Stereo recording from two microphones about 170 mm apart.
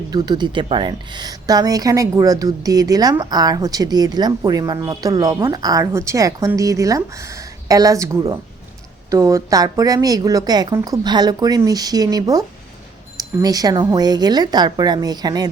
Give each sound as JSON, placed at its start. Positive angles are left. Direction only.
{"t": 0.1, "sound": "speech", "side_deg": -25}